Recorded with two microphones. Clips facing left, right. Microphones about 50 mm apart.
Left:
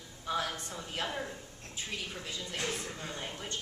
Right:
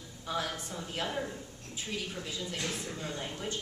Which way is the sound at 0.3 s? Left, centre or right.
Centre.